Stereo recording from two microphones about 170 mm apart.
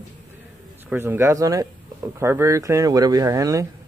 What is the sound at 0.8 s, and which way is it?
Speech, 15° right (ahead or behind).